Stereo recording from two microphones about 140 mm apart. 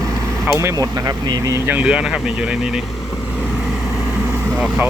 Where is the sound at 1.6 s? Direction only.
10° right (ahead or behind).